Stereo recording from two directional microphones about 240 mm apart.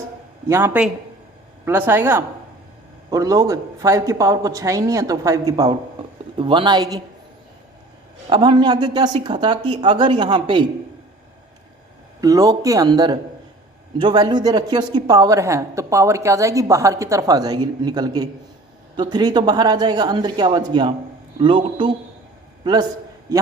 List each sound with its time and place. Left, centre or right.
0.4 s speech: centre
8.3 s speech: centre
12.2 s a man's voice: centre